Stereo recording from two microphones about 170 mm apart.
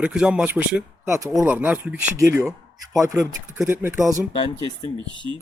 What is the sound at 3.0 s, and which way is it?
Speech, 20° right (ahead or behind).